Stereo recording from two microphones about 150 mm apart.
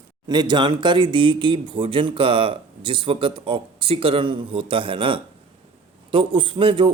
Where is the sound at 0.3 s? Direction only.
30° right (ahead or behind).